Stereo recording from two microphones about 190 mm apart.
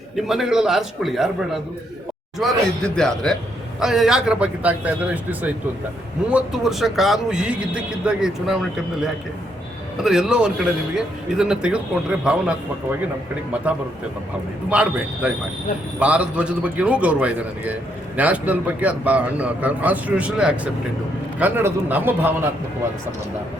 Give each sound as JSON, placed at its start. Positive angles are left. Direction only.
{"t": 0.2, "sound": "a man's voice", "side_deg": 0}
{"t": 2.4, "sound": "a man's voice", "side_deg": 5}
{"t": 10.0, "sound": "a man's voice", "side_deg": 0}
{"t": 14.7, "sound": "a man's voice", "side_deg": -5}